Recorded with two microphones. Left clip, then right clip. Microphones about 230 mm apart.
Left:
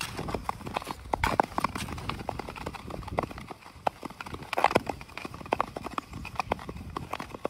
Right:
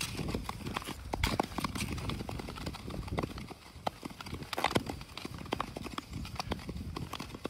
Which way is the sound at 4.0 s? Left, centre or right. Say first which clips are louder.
Left 5 dB; left.